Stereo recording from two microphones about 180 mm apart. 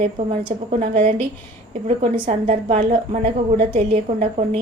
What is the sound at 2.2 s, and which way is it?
A woman's voice, 40° right (ahead or behind).